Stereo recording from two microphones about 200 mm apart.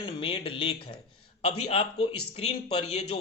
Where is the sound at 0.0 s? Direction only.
25° left (ahead or behind).